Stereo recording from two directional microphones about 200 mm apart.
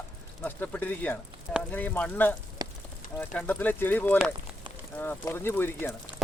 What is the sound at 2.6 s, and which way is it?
Rain on surface, 20° right (ahead or behind).